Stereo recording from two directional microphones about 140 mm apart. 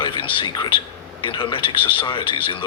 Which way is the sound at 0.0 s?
35° left (ahead or behind).